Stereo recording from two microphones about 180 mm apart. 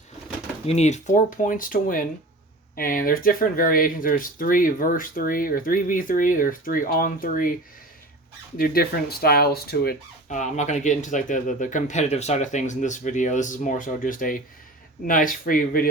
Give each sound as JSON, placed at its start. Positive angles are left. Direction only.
{"t": 0.7, "sound": "speech", "side_deg": 40}
{"t": 8.5, "sound": "speech", "side_deg": 55}
{"t": 10.2, "sound": "speech", "side_deg": 40}